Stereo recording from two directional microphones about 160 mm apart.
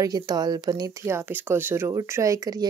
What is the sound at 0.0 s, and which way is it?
Speech, 25° right (ahead or behind).